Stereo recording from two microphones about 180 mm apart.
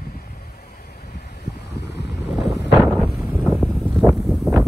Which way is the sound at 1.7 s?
70° left (ahead or behind).